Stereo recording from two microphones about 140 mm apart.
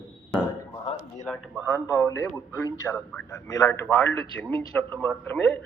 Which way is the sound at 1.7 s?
20° left (ahead or behind).